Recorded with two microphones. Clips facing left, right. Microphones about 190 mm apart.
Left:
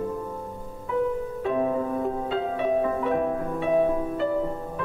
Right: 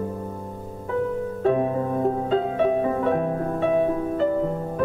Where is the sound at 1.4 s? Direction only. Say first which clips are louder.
Right 3 dB; 40° right (ahead or behind).